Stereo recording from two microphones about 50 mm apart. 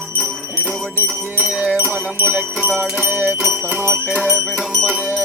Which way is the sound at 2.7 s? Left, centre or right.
Right.